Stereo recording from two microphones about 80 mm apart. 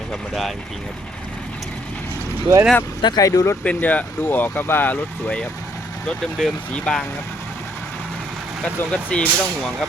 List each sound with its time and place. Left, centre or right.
2.5 s speech: right
3.0 s speech: left
3.2 s speech: left
3.6 s speech: centre
8.8 s speech: centre